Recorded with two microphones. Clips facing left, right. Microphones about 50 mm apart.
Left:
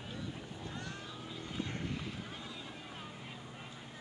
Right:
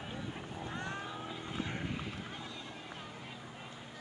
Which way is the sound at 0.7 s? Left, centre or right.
Right.